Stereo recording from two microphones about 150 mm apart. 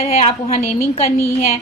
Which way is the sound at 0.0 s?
45° left (ahead or behind).